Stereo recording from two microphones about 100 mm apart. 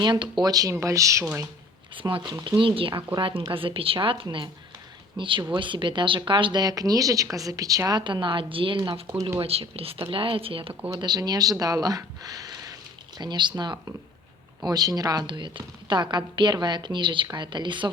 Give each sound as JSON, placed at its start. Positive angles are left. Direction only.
{"t": 0.0, "sound": "speech", "side_deg": -50}
{"t": 2.0, "sound": "a woman's voice", "side_deg": -55}
{"t": 9.4, "sound": "speech", "side_deg": -80}
{"t": 10.9, "sound": "speech", "side_deg": -40}
{"t": 13.1, "sound": "speech", "side_deg": -50}
{"t": 15.3, "sound": "speech", "side_deg": -50}